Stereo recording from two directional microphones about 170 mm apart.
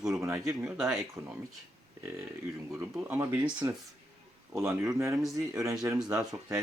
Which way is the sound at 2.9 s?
10° right (ahead or behind).